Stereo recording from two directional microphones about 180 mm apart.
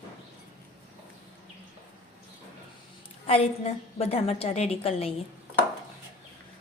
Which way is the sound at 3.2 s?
35° left (ahead or behind).